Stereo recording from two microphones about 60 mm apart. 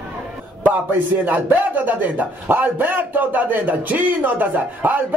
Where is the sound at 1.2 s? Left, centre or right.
Right.